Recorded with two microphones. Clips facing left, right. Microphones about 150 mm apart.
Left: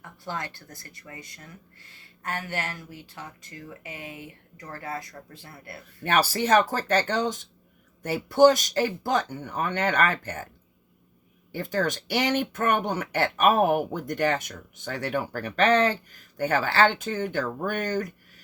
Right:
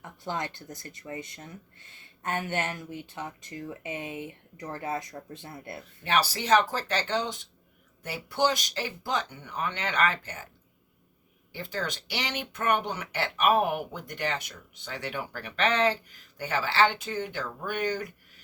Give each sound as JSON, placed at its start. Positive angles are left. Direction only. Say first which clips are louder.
{"t": 0.0, "sound": "speech", "louder": "right 1 dB", "side_deg": -20}
{"t": 6.0, "sound": "speech", "louder": "left 4 dB", "side_deg": 45}
{"t": 11.5, "sound": "speech", "louder": "left 7 dB", "side_deg": 45}